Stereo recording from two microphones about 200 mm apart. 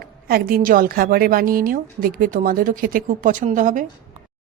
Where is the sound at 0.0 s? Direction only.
50° right (ahead or behind).